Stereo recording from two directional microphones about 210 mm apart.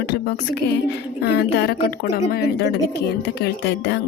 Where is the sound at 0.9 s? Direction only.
50° left (ahead or behind).